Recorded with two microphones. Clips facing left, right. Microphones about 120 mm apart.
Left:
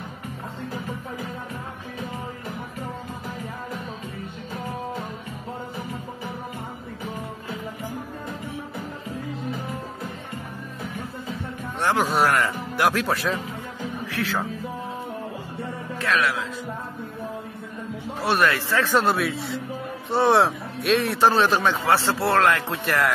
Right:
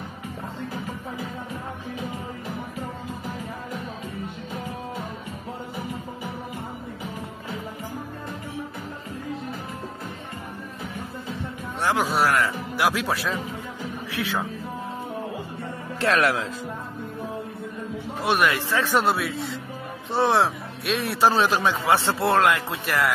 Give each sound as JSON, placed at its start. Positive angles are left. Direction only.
{"t": 11.8, "sound": "speech", "side_deg": -5}
{"t": 16.0, "sound": "a man's voice", "side_deg": -35}
{"t": 18.2, "sound": "speech", "side_deg": -15}
{"t": 19.1, "sound": "a man's voice", "side_deg": 0}